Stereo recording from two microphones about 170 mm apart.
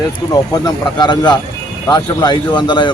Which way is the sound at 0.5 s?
25° left (ahead or behind).